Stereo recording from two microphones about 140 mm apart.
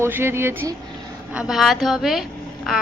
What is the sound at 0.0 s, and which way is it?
Speech, 15° right (ahead or behind).